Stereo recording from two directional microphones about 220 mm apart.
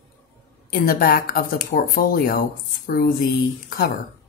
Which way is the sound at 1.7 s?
45° left (ahead or behind).